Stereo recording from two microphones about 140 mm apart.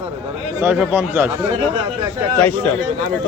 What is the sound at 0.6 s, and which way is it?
Speech, 10° right (ahead or behind).